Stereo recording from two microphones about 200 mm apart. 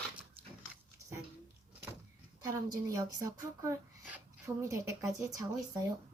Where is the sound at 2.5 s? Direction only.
15° right (ahead or behind).